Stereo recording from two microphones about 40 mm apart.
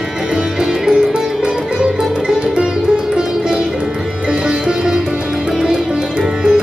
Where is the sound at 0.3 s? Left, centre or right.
Centre.